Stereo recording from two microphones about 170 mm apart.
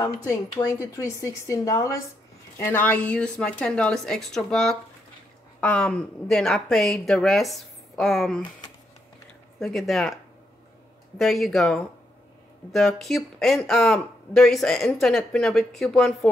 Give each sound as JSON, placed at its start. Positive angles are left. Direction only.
{"t": 0.6, "sound": "speech", "side_deg": 20}
{"t": 9.6, "sound": "speech", "side_deg": 0}
{"t": 11.1, "sound": "speech", "side_deg": 0}